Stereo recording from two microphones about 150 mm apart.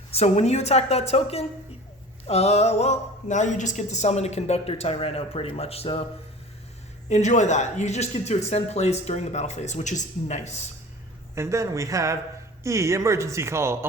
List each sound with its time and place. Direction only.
0.1 s speech: 45° left (ahead or behind)
7.1 s speech: 50° left (ahead or behind)
11.3 s speech: 20° right (ahead or behind)